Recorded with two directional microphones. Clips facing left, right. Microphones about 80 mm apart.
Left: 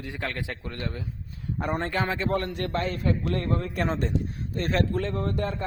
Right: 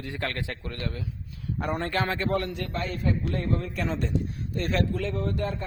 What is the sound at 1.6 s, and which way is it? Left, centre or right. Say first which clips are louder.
Speech: left 1 dB; left.